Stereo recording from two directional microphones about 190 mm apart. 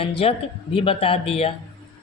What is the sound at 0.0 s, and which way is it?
A man's voice, 30° left (ahead or behind).